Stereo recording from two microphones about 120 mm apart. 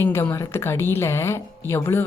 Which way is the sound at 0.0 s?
20° left (ahead or behind).